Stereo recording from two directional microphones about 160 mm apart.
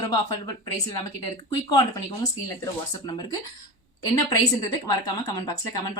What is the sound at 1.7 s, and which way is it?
A woman's voice, 25° left (ahead or behind).